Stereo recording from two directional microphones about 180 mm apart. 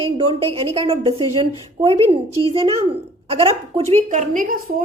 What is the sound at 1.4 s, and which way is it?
Speech, 30° right (ahead or behind).